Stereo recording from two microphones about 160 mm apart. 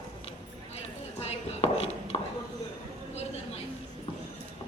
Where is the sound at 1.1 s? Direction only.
40° left (ahead or behind).